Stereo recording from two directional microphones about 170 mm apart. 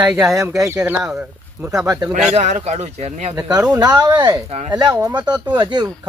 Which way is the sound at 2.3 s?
40° right (ahead or behind).